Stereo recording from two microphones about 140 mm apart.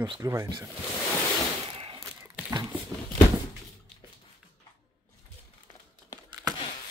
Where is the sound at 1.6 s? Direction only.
40° right (ahead or behind).